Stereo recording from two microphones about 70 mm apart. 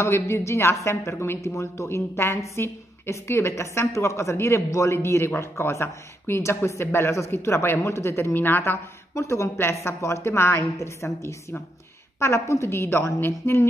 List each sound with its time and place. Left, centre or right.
0.0 s a woman's voice: left
9.1 s a woman's voice: left